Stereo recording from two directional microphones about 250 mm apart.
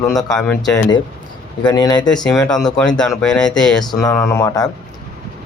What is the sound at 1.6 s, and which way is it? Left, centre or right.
Speech, centre.